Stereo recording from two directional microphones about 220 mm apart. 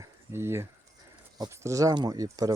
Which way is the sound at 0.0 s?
10° right (ahead or behind).